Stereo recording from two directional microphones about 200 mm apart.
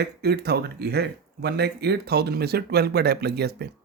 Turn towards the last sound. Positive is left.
turn(degrees=-55)  # may be behind; listen again after turning